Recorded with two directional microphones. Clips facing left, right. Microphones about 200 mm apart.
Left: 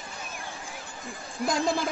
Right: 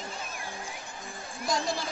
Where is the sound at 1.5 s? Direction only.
55° left (ahead or behind).